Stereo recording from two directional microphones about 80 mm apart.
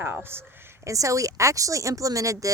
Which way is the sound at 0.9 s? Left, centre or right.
Right.